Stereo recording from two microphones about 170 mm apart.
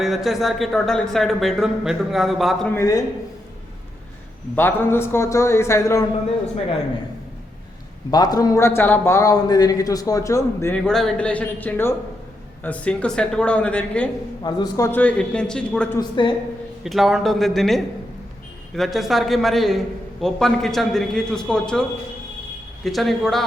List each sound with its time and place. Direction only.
0.0 s speech: centre (ahead or behind)
2.7 s speech: 20° left (ahead or behind)
4.5 s a man's voice: 15° left (ahead or behind)
8.1 s a man's voice: 20° left (ahead or behind); by 14.1 s 5° left (ahead or behind)
14.4 s speech: 20° left (ahead or behind); by 15.9 s 5° left (ahead or behind)
16.0 s speech: 30° left (ahead or behind)
16.8 s speech: centre (ahead or behind)